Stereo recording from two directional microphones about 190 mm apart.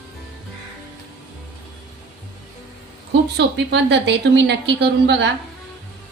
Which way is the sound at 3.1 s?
65° right (ahead or behind).